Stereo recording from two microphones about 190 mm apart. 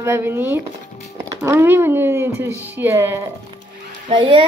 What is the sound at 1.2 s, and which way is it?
Speech, 15° right (ahead or behind).